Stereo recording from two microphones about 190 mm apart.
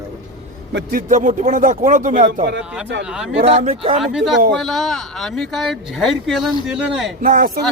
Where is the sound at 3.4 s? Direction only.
30° right (ahead or behind).